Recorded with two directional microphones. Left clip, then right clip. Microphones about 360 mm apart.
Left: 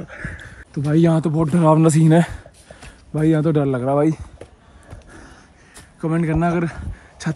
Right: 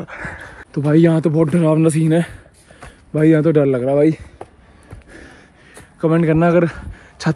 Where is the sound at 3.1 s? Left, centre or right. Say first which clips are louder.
Right 5 dB; centre.